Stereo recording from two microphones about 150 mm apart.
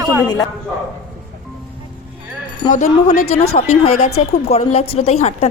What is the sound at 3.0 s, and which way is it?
Speech, 45° left (ahead or behind).